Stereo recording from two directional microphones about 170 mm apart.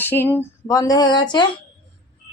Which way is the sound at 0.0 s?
10° left (ahead or behind).